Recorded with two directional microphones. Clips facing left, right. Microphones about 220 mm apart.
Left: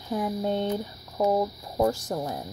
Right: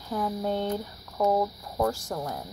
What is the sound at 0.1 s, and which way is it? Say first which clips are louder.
Speech: left 2 dB; 20° left (ahead or behind).